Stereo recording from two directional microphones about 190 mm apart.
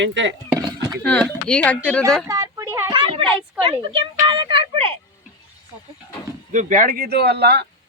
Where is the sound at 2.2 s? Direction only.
15° right (ahead or behind).